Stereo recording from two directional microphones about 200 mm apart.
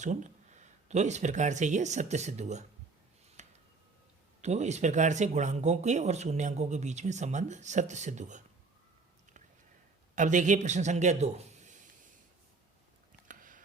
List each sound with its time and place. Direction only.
0.0 s speech: 35° right (ahead or behind)
3.4 s a sound: 35° right (ahead or behind)
4.4 s speech: 35° right (ahead or behind)
10.2 s a man's voice: 40° right (ahead or behind)
13.2 s biting: 40° right (ahead or behind)